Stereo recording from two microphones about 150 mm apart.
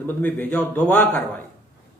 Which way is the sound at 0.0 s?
10° left (ahead or behind).